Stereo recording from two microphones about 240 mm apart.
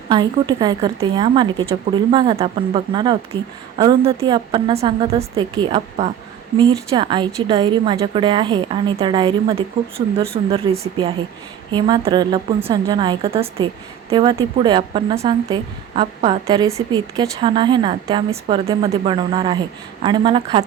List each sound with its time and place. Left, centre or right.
0.1 s speech: centre